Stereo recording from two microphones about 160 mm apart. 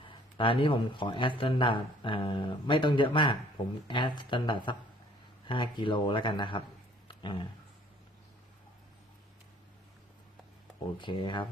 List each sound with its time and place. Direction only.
0.0 s speech: 30° left (ahead or behind)
7.1 s a sound: 30° left (ahead or behind)
10.9 s speech: 30° left (ahead or behind)